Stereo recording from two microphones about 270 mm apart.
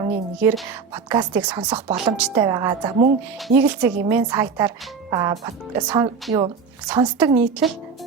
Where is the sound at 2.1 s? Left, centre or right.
Centre.